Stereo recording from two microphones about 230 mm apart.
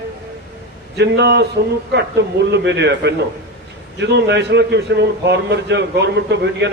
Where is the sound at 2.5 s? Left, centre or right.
Right.